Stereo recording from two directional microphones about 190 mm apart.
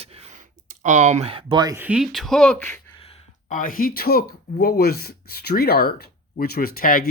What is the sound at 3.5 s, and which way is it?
Speech, 45° left (ahead or behind).